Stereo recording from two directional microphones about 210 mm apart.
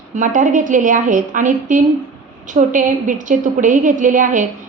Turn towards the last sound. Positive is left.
turn(degrees=-40)  # may be behind; listen again after turning